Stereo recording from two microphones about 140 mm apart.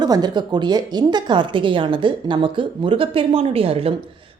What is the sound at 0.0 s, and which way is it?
A woman's voice, 30° right (ahead or behind).